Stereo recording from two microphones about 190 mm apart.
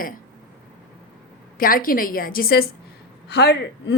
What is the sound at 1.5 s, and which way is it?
A woman's voice, 50° left (ahead or behind).